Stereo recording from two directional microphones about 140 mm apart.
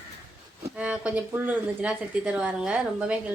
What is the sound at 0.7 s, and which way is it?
A woman's voice, 10° right (ahead or behind).